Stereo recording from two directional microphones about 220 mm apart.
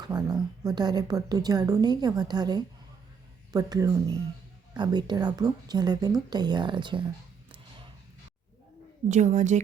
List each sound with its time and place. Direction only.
0.0 s a woman's voice: 15° right (ahead or behind)
9.0 s a woman's voice: 35° right (ahead or behind)